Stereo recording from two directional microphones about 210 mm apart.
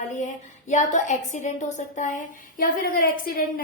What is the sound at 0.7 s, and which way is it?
A woman's voice, 35° left (ahead or behind).